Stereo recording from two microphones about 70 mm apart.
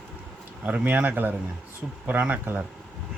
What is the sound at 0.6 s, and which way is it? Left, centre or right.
Speech, right.